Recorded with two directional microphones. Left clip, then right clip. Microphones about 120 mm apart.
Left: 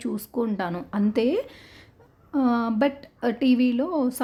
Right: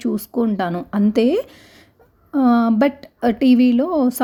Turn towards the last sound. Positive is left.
turn(degrees=-40)  # may be behind; listen again after turning